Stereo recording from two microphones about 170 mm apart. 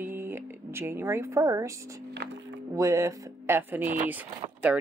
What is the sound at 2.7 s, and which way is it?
Speech, 20° right (ahead or behind).